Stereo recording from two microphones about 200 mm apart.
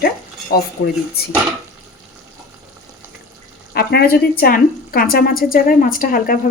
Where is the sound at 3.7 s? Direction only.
50° left (ahead or behind).